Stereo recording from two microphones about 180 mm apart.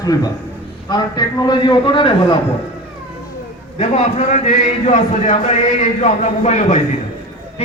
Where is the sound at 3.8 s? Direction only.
40° left (ahead or behind).